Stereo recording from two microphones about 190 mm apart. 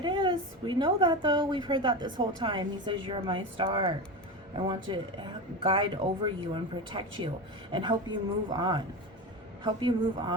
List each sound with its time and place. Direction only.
0.0 s a woman's voice: 25° right (ahead or behind)